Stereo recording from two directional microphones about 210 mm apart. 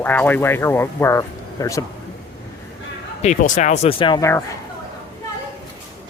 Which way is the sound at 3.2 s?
35° left (ahead or behind).